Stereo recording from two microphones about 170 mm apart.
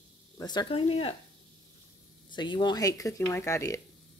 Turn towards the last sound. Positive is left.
turn(degrees=20)  # may be behind; listen again after turning